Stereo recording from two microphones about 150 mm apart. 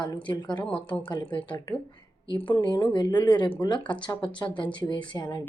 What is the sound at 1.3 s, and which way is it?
Speech, 30° left (ahead or behind).